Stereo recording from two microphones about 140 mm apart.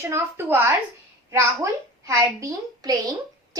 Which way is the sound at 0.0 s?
20° right (ahead or behind).